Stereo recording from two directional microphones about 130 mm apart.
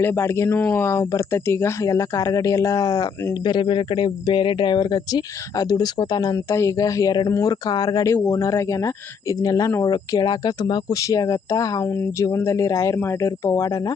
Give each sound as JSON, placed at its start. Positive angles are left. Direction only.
{"t": 0.0, "sound": "speech", "side_deg": 20}